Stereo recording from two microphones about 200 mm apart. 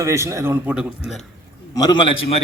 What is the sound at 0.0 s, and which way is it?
A man's voice, 15° right (ahead or behind).